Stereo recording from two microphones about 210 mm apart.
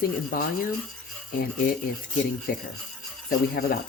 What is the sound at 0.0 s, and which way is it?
Speech, 45° left (ahead or behind).